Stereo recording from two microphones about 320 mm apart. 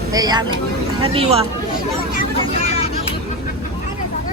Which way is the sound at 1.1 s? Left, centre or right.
Centre.